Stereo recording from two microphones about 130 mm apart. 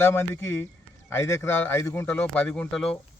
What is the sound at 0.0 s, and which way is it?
Speech, 20° left (ahead or behind).